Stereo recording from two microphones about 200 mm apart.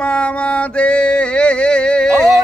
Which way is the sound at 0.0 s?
5° left (ahead or behind).